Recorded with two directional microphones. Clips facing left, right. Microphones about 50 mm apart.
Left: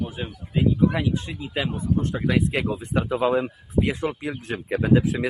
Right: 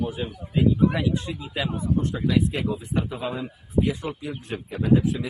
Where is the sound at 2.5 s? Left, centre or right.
Left.